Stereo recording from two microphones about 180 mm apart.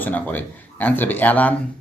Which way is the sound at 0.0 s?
10° left (ahead or behind).